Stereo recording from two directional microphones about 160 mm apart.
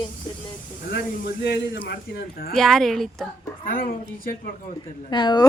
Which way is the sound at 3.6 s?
60° left (ahead or behind).